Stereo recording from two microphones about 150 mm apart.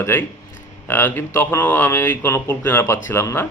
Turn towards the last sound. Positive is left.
turn(degrees=15)  # may be behind; listen again after turning